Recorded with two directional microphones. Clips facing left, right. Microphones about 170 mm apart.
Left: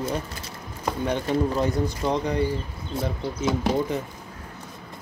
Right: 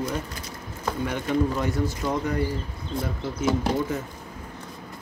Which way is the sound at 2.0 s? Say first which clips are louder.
Left 3 dB; 20° left (ahead or behind).